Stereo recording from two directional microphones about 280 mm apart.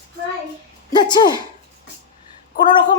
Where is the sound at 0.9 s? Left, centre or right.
Centre.